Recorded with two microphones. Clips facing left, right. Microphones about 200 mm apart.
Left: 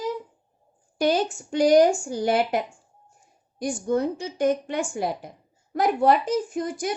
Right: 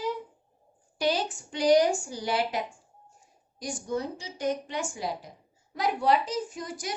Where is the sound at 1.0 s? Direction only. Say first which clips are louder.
Left 5 dB; 50° left (ahead or behind).